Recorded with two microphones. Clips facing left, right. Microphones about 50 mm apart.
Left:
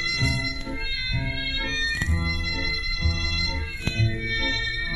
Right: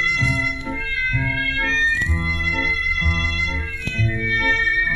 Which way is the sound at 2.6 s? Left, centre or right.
Right.